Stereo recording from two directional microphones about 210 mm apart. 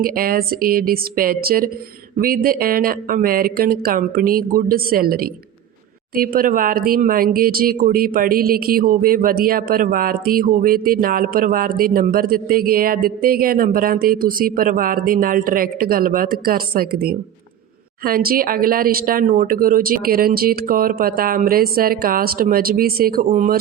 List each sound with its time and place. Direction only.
0.0 s speech: 45° right (ahead or behind)
23.3 s speech: 35° right (ahead or behind)